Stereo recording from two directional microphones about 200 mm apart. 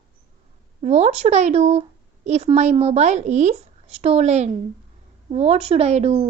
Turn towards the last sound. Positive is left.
turn(degrees=-30)  # may be behind; listen again after turning